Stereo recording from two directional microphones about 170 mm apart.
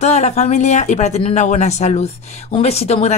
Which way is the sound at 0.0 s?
40° left (ahead or behind).